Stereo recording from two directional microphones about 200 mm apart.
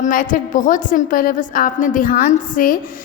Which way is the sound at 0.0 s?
40° left (ahead or behind).